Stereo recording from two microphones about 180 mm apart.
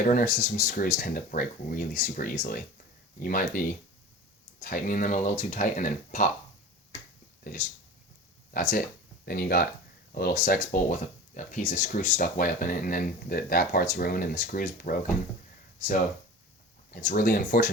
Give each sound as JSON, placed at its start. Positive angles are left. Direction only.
{"t": 0.0, "sound": "speech", "side_deg": 45}
{"t": 7.5, "sound": "speech", "side_deg": 50}
{"t": 9.2, "sound": "speech", "side_deg": 55}
{"t": 16.9, "sound": "speech", "side_deg": 50}